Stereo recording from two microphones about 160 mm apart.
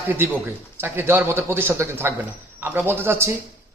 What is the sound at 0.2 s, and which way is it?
A man's voice, 15° right (ahead or behind).